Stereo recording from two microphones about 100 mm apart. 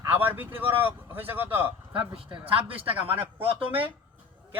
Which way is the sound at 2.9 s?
20° right (ahead or behind).